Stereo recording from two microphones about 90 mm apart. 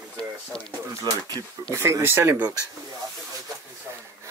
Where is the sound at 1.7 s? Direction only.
30° right (ahead or behind).